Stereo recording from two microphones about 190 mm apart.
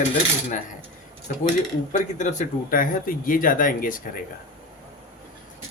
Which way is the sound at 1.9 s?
40° left (ahead or behind).